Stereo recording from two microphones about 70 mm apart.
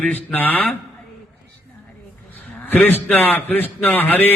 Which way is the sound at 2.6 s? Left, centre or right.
Left.